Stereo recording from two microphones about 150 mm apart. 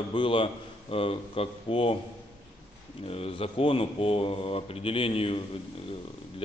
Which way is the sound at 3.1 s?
40° left (ahead or behind).